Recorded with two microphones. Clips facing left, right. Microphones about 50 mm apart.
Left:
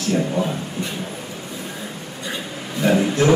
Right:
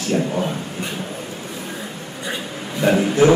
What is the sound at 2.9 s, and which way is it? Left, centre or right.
Speech, centre.